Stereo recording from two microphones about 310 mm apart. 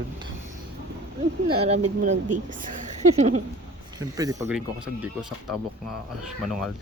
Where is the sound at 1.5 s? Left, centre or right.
Centre.